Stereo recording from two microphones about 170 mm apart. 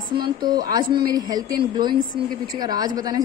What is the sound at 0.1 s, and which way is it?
A woman's voice, 25° right (ahead or behind).